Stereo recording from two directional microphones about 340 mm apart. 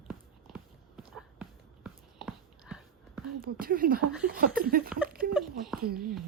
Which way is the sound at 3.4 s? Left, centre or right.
Right.